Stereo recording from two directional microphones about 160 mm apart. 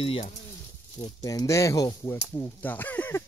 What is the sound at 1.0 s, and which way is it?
Speech, 25° left (ahead or behind).